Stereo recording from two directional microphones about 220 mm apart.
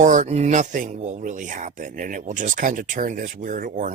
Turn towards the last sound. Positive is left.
turn(degrees=-35)  # may be behind; listen again after turning